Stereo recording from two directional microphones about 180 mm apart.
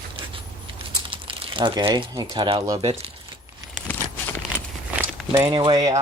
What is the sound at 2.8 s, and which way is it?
Keys jangling, 30° right (ahead or behind).